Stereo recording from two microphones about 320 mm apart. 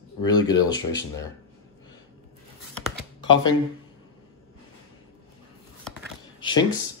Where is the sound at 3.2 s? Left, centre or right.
Centre.